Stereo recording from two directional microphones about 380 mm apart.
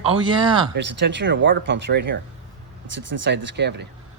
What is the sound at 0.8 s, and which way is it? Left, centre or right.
Speech, right.